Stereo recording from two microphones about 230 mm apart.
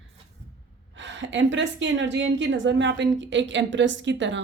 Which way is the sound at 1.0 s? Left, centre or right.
Right.